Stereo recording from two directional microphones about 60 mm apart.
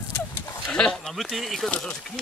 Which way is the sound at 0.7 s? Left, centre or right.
Centre.